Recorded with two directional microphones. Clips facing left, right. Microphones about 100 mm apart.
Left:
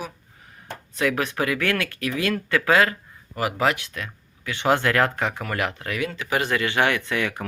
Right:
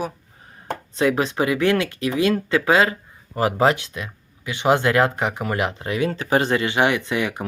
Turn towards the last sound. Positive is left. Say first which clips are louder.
# right 2 dB
turn(degrees=-20)  # may be behind; listen again after turning